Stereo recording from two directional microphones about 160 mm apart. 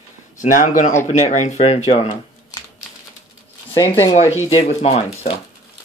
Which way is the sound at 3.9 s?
40° left (ahead or behind).